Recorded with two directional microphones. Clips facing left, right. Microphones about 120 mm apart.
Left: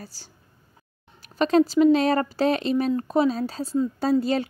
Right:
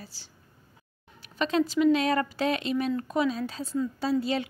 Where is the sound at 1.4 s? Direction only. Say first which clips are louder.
Left 6 dB; 40° left (ahead or behind).